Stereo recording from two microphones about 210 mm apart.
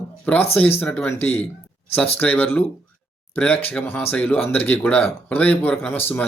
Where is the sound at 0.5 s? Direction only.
10° left (ahead or behind).